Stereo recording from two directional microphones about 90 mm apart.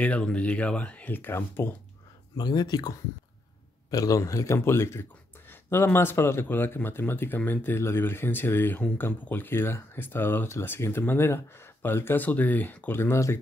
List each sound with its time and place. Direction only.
0.0 s speech: 15° left (ahead or behind)
2.3 s a man's voice: 50° left (ahead or behind); by 13.4 s 30° left (ahead or behind)